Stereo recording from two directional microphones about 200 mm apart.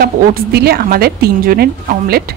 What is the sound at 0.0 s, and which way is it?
Speech, 50° right (ahead or behind).